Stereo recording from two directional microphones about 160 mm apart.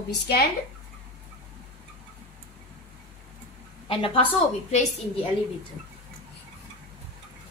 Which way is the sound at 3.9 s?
35° left (ahead or behind).